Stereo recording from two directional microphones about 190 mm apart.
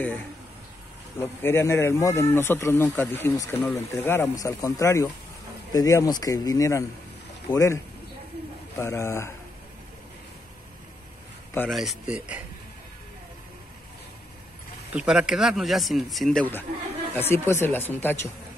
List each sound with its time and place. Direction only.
1.2 s a man's voice: 10° left (ahead or behind)
11.7 s a man's voice: centre (ahead or behind)
14.9 s a man's voice: 5° right (ahead or behind); by 18.3 s 10° left (ahead or behind)